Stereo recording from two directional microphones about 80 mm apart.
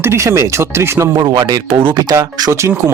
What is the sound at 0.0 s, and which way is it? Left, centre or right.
Speech, right.